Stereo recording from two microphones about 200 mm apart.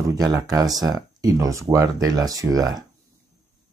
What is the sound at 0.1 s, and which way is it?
Speech, 20° right (ahead or behind).